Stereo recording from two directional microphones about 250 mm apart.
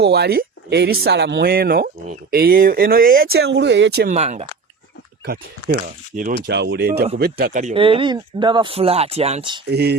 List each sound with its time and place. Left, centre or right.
0.0 s speech: right
4.1 s speech: right
5.2 s speech: right
9.6 s speech: right